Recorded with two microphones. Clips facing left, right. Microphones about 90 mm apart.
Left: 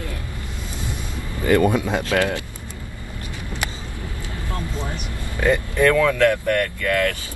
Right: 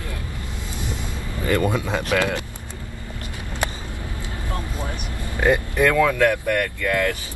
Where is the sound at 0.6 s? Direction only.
20° right (ahead or behind).